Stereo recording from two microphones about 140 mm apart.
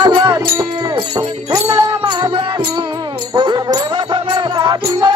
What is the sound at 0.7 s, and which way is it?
Jingle bell, 30° right (ahead or behind).